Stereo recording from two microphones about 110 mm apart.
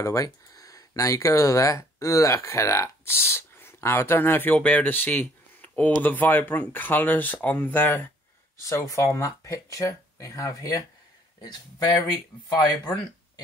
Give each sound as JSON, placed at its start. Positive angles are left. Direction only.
{"t": 0.0, "sound": "speech", "side_deg": 30}
{"t": 8.5, "sound": "speech", "side_deg": 30}